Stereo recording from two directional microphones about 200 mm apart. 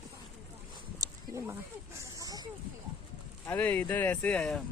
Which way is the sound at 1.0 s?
15° right (ahead or behind).